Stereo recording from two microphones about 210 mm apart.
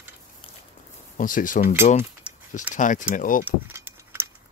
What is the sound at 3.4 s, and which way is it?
Keys jangling, 10° right (ahead or behind).